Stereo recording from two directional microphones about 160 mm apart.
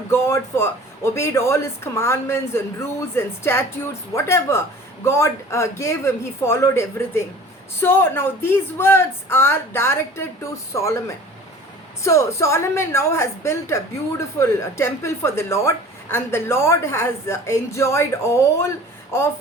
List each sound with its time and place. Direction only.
0.1 s a woman's voice: 15° left (ahead or behind)
12.0 s a woman's voice: 20° left (ahead or behind)